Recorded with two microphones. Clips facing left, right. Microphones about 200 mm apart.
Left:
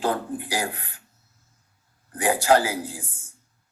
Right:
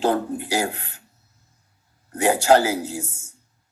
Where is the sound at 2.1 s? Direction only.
25° right (ahead or behind).